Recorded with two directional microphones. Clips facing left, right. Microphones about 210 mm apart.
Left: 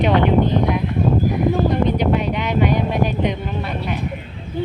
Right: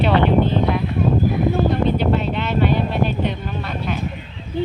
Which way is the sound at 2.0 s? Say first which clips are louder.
Left 1 dB; 15° left (ahead or behind).